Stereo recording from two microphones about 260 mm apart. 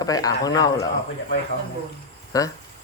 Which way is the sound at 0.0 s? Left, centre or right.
Centre.